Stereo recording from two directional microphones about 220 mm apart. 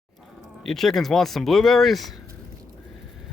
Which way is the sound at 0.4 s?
Centre (ahead or behind).